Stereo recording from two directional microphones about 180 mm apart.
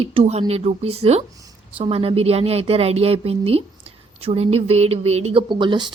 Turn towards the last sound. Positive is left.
turn(degrees=-25)  # may be behind; listen again after turning